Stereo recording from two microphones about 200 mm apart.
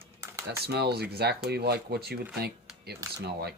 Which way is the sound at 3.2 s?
55° right (ahead or behind).